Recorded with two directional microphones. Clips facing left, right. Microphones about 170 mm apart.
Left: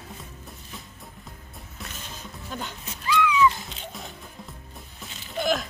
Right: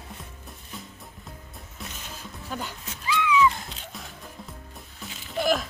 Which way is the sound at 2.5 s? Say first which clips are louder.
Right 1 dB; 5° right (ahead or behind).